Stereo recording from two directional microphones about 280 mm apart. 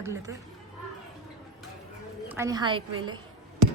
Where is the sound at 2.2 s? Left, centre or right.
Centre.